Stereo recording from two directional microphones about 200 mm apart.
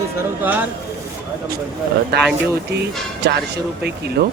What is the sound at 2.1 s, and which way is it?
Speech, 55° right (ahead or behind).